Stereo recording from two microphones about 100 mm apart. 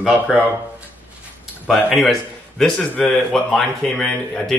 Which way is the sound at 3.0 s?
5° left (ahead or behind).